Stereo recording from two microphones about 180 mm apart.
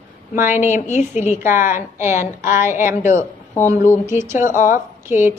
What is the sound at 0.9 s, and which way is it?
Speech, 40° left (ahead or behind).